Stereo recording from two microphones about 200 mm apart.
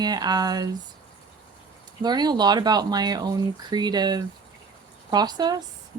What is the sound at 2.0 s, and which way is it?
Speech, 20° right (ahead or behind).